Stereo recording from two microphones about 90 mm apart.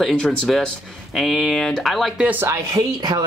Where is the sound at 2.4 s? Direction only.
35° right (ahead or behind).